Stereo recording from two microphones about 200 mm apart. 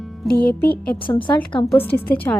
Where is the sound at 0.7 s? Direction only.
5° left (ahead or behind).